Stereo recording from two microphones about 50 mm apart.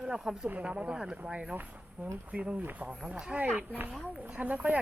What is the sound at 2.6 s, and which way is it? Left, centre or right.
Speech, right.